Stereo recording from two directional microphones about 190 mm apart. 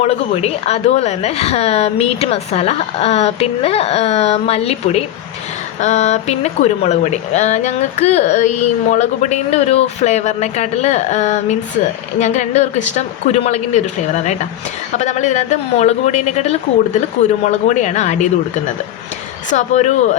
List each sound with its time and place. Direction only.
0.0 s speech: 35° left (ahead or behind)
14.9 s speech: 40° left (ahead or behind)
19.5 s speech: 40° left (ahead or behind)